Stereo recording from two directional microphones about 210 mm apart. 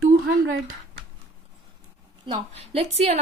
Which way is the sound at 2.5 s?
30° right (ahead or behind).